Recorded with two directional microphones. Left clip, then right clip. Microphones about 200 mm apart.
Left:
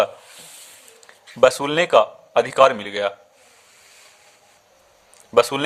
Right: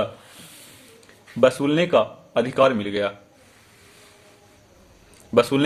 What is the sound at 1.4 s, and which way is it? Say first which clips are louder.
Speech: left 2 dB; 35° left (ahead or behind).